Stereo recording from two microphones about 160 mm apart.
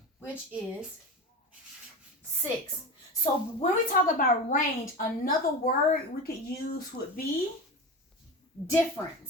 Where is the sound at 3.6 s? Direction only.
60° left (ahead or behind).